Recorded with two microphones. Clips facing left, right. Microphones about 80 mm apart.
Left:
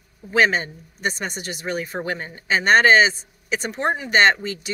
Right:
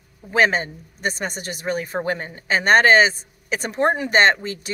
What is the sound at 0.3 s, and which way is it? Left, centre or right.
Speech, right.